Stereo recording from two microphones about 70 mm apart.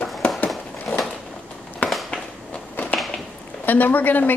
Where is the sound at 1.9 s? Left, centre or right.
Centre.